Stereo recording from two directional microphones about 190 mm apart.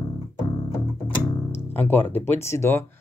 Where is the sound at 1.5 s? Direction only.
10° left (ahead or behind).